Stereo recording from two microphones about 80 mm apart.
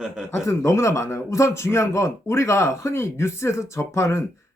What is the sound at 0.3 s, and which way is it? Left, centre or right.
A man's voice, left.